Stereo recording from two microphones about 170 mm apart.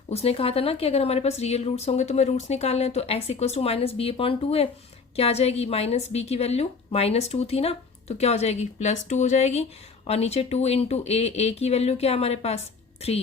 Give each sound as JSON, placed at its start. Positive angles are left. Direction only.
{"t": 0.1, "sound": "a woman's voice", "side_deg": 35}